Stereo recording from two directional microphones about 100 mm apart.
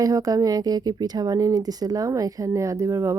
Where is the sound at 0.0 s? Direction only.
35° right (ahead or behind).